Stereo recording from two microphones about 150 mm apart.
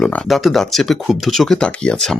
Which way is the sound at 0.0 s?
Centre (ahead or behind).